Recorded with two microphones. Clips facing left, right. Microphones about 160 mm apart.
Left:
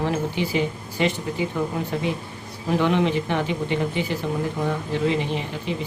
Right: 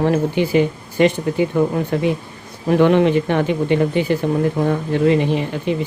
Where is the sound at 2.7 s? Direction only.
55° right (ahead or behind).